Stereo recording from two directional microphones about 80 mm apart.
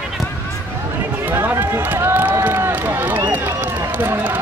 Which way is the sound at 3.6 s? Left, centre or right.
Right.